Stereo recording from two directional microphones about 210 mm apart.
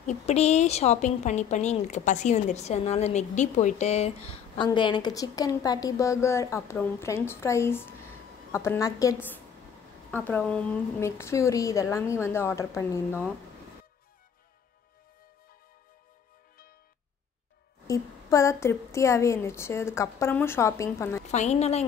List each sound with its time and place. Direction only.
0.0 s a woman's voice: 30° left (ahead or behind); by 9.1 s 15° left (ahead or behind)
10.1 s a woman's voice: 10° left (ahead or behind)
17.8 s a woman's voice: 15° left (ahead or behind)
21.3 s speech: 30° left (ahead or behind)